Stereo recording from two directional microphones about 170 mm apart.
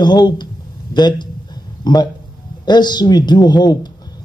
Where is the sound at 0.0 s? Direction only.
25° left (ahead or behind).